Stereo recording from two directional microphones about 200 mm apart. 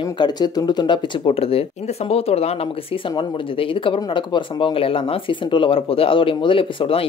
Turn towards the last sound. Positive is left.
turn(degrees=25)  # may be behind; listen again after turning